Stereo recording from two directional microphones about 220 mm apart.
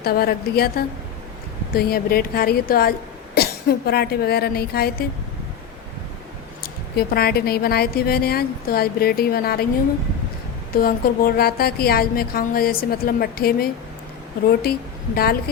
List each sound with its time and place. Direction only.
0.0 s a woman's voice: 45° left (ahead or behind)
6.6 s a woman's voice: 45° left (ahead or behind)
10.8 s a woman's voice: 40° left (ahead or behind)